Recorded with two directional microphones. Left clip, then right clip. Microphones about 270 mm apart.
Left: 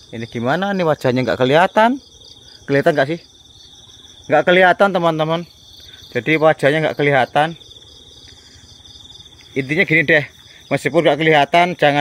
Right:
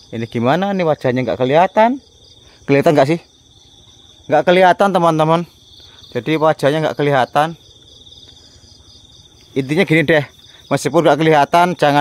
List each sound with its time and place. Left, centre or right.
0.1 s speech: right
0.6 s speech: centre
2.6 s speech: right
4.3 s speech: centre; by 5.5 s right
6.1 s speech: centre
9.5 s speech: centre